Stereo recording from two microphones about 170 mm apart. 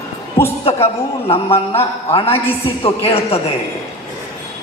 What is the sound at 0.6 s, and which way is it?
A man's voice, 35° left (ahead or behind).